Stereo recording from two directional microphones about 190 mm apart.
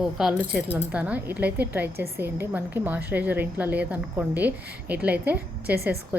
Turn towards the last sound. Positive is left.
turn(degrees=-55)  # may be behind; listen again after turning